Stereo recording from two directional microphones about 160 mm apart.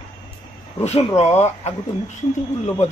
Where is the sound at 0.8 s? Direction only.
45° left (ahead or behind).